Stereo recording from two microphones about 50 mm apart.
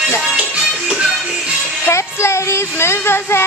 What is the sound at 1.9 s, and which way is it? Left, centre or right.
Music, left.